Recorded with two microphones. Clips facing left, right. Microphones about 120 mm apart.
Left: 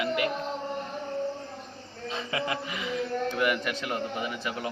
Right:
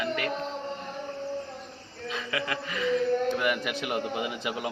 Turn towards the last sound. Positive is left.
turn(degrees=-15)  # may be behind; listen again after turning